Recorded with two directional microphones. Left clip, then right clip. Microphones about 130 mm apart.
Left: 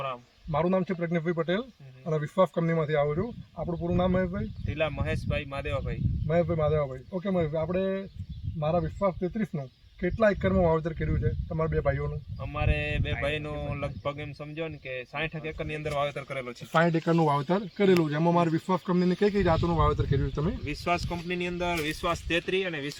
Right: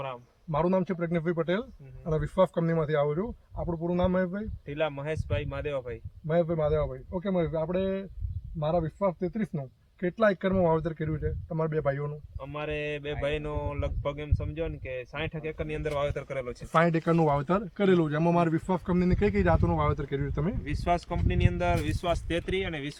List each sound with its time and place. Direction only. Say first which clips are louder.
0.5 s speech: even; 5° left (ahead or behind)
4.8 s speech: even; 20° right (ahead or behind)
6.2 s speech: even; 5° left (ahead or behind)
12.4 s speech: left 2 dB; 20° right (ahead or behind)
16.7 s speech: even; 10° left (ahead or behind)
17.4 s speech: left 1 dB; centre (ahead or behind)
20.7 s speech: right 1 dB; 30° right (ahead or behind)